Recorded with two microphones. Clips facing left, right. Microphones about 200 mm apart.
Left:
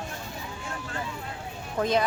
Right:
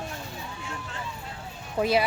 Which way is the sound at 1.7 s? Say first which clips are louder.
Right 1 dB; 10° right (ahead or behind).